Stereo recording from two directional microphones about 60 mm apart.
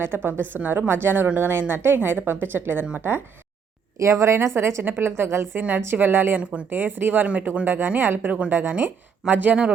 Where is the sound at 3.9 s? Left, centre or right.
Right.